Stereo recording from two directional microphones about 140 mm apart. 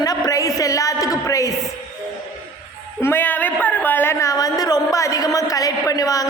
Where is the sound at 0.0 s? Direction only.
25° left (ahead or behind).